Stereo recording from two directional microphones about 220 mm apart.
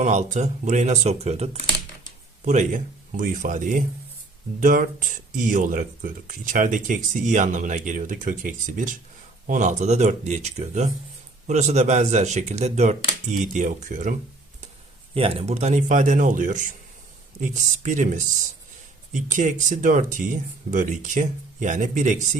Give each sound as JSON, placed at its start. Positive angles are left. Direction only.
{"t": 0.0, "sound": "speech", "side_deg": -30}
{"t": 15.1, "sound": "speech", "side_deg": -25}